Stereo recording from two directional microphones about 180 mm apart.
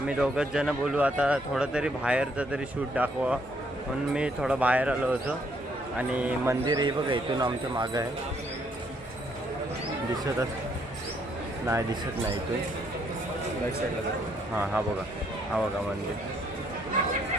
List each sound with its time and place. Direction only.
0.1 s a man's voice: 5° right (ahead or behind); by 8.0 s 20° right (ahead or behind)
11.6 s speech: 15° right (ahead or behind)
14.5 s a man's voice: 5° right (ahead or behind)